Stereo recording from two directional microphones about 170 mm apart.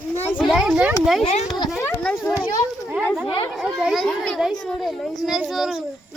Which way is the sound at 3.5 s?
5° right (ahead or behind).